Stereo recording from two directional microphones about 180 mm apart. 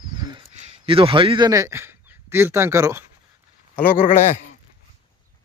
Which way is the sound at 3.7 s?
55° left (ahead or behind).